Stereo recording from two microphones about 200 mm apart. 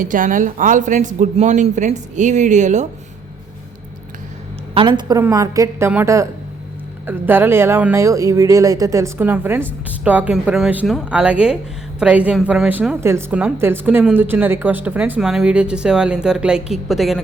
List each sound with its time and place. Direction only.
0.0 s a man's voice: 40° right (ahead or behind)
4.7 s a woman's voice: 25° right (ahead or behind); by 17.2 s centre (ahead or behind)